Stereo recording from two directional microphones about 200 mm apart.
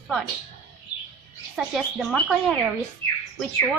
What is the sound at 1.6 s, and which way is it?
Speech, centre (ahead or behind).